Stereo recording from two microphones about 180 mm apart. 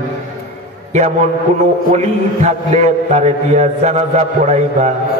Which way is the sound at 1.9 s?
40° right (ahead or behind).